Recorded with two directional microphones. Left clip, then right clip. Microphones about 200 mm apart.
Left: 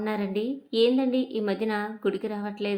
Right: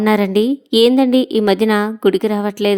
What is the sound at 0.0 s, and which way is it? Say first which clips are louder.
A woman's voice: right 14 dB; 50° right (ahead or behind).